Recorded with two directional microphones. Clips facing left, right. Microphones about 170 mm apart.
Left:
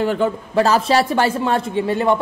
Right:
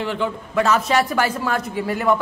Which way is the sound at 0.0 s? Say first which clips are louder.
Left 5 dB; 45° left (ahead or behind).